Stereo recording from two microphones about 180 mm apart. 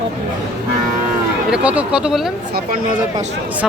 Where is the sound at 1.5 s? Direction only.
5° right (ahead or behind).